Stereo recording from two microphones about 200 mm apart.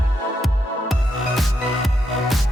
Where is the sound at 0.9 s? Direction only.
Centre (ahead or behind).